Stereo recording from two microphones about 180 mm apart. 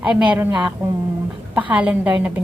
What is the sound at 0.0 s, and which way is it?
A woman's voice, 5° right (ahead or behind).